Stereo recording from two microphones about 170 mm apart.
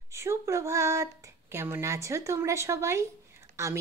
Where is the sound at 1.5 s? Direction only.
15° right (ahead or behind).